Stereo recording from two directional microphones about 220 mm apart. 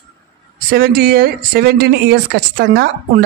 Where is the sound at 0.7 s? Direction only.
45° right (ahead or behind).